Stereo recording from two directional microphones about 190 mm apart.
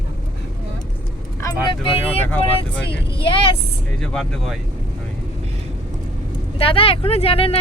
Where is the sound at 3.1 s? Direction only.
25° left (ahead or behind).